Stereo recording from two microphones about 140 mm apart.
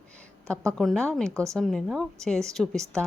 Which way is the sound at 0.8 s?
5° left (ahead or behind).